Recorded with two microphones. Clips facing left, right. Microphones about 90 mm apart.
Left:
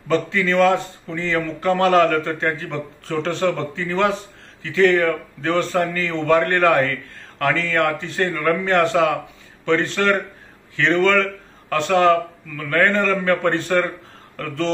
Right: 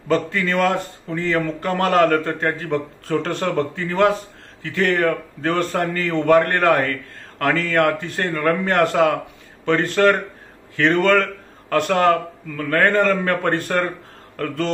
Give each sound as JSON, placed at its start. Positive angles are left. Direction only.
{"t": 0.1, "sound": "a man's voice", "side_deg": -45}